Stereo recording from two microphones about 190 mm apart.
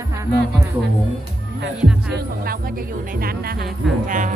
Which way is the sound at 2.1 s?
50° right (ahead or behind).